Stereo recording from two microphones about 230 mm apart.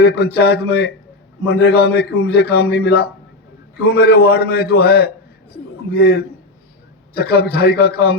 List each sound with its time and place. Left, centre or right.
0.0 s a man's voice: left